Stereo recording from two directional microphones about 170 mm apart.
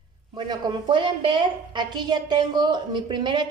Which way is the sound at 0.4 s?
25° right (ahead or behind).